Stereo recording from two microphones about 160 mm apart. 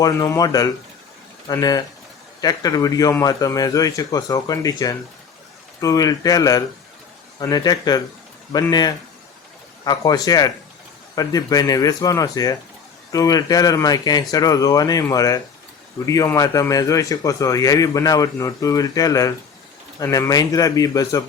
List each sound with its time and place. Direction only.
0.0 s speech: 20° left (ahead or behind)